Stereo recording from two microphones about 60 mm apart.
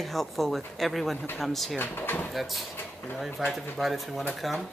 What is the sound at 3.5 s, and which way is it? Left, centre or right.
Speech, centre.